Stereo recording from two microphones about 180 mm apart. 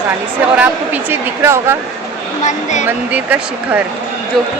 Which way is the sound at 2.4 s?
40° left (ahead or behind).